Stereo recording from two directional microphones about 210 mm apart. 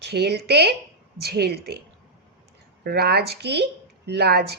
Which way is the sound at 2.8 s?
50° right (ahead or behind).